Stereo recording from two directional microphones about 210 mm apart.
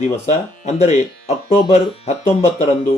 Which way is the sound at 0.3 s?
35° left (ahead or behind).